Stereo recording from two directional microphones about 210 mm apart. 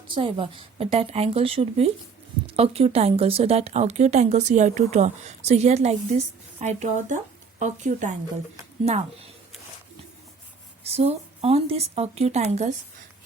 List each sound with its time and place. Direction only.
0.1 s speech: 25° right (ahead or behind)
10.8 s speech: 30° right (ahead or behind)